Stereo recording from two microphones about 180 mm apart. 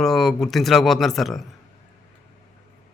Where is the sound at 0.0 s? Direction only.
Centre (ahead or behind).